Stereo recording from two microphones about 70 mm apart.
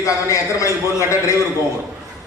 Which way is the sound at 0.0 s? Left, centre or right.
Left.